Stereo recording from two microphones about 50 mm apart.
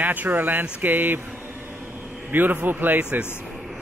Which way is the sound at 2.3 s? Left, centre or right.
Right.